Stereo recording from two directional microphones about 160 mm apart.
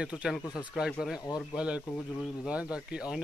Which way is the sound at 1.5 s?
5° right (ahead or behind).